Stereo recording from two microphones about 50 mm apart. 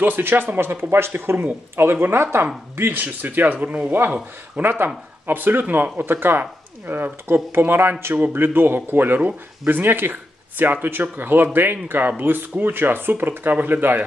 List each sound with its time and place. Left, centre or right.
0.0 s speech: right
4.1 s speech: right